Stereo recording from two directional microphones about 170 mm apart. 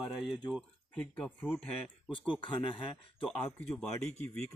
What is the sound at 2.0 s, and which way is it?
Speech, 30° left (ahead or behind).